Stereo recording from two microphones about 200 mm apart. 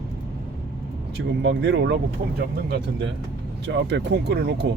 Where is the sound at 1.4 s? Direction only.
60° right (ahead or behind).